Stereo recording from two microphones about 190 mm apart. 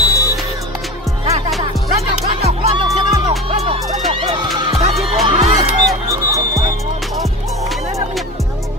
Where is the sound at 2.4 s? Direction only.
35° right (ahead or behind).